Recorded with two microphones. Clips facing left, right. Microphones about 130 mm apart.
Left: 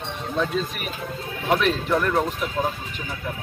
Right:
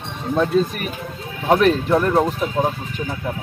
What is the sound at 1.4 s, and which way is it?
Speech, 40° right (ahead or behind).